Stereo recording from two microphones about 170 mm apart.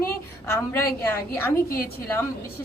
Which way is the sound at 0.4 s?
15° left (ahead or behind).